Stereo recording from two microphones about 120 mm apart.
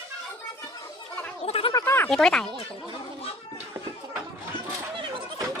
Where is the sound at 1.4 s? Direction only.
50° left (ahead or behind).